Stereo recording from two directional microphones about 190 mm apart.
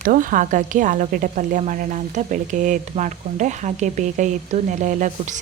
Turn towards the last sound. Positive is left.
turn(degrees=-40)  # may be behind; listen again after turning